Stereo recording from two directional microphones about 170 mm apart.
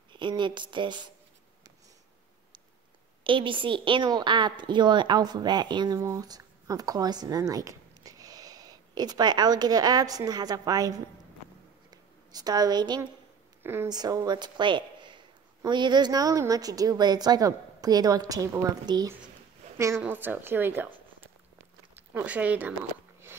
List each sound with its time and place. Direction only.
0.1 s a woman's voice: 30° right (ahead or behind)
3.3 s a woman's voice: 30° right (ahead or behind)
11.9 s a sound: 25° right (ahead or behind)
13.6 s a woman's voice: 15° right (ahead or behind)
20.0 s speech: 10° right (ahead or behind)